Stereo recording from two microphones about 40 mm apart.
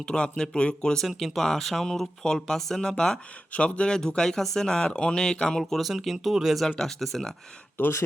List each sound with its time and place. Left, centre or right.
0.0 s speech: left
1.0 s speech: centre
3.5 s speech: left; by 5.8 s centre
5.8 s speech: centre
6.7 s speech: centre
7.8 s speech: left